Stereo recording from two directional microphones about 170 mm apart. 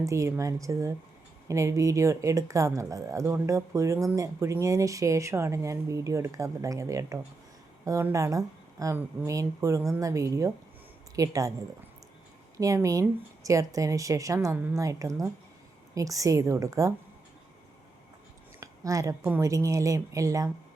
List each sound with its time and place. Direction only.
0.0 s speech: 15° right (ahead or behind)
12.5 s speech: 20° right (ahead or behind)
18.6 s speech: 20° right (ahead or behind)